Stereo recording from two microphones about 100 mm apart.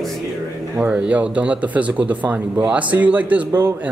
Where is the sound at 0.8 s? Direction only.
15° right (ahead or behind).